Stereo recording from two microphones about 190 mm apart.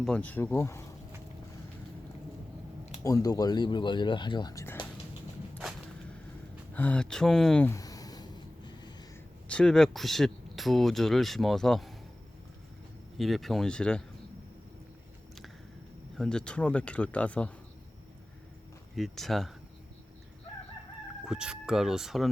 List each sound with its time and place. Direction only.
0.0 s speech: 5° left (ahead or behind)
3.0 s speech: 20° left (ahead or behind)
6.7 s a sound: 5° left (ahead or behind)
9.5 s speech: 5° left (ahead or behind)
13.1 s speech: centre (ahead or behind)
16.1 s speech: 5° left (ahead or behind)
18.9 s speech: centre (ahead or behind)
21.2 s speech: 5° right (ahead or behind)